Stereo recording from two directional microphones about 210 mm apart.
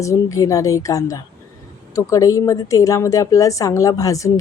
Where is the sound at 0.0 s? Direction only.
15° left (ahead or behind).